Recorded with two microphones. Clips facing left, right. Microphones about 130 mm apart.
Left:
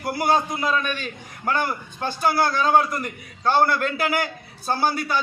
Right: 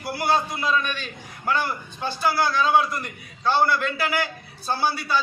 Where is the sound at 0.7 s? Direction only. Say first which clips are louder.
Right 3 dB; 45° left (ahead or behind).